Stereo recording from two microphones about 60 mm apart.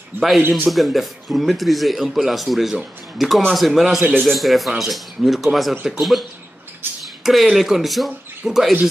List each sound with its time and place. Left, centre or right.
0.1 s a man's voice: right
0.7 s speech: centre
4.1 s speech: centre